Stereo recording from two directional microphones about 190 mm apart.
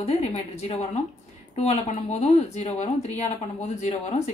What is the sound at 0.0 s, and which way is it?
A woman's voice, 30° left (ahead or behind).